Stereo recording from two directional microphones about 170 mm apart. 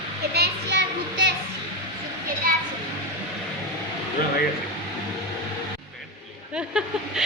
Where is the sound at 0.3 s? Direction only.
90° right.